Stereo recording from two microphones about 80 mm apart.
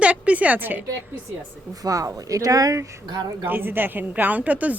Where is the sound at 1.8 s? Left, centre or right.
Right.